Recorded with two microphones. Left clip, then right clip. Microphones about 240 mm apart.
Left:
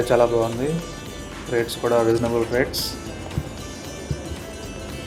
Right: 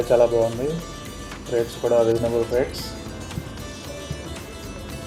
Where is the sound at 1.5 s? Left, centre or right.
Left.